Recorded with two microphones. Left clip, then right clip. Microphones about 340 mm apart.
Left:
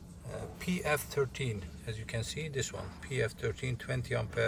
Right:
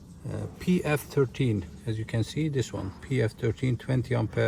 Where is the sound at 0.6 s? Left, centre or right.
Centre.